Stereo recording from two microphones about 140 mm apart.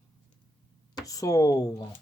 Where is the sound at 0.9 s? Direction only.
25° left (ahead or behind).